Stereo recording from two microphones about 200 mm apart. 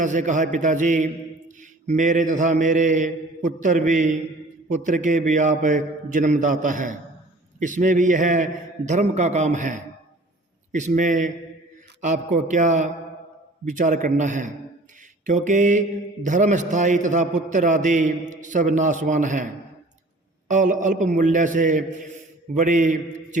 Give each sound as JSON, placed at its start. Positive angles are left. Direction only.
{"t": 0.0, "sound": "a man's voice", "side_deg": -40}
{"t": 20.5, "sound": "a man's voice", "side_deg": -40}